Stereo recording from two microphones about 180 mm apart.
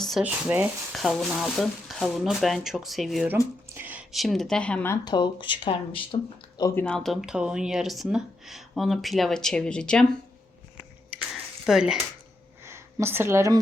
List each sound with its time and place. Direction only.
0.0 s a sound: centre (ahead or behind)
0.3 s speech: 10° right (ahead or behind); by 4.9 s 10° left (ahead or behind)
5.0 s speech: 25° left (ahead or behind)
6.8 s speech: 5° left (ahead or behind)
11.6 s speech: 5° right (ahead or behind)
12.6 s speech: 15° right (ahead or behind)